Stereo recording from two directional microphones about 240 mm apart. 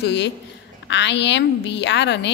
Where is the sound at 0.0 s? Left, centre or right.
Left.